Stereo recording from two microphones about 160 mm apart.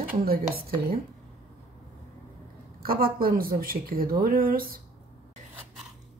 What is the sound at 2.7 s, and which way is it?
Speech, 70° right (ahead or behind).